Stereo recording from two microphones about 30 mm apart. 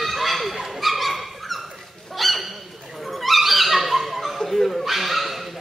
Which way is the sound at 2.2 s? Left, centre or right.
Centre.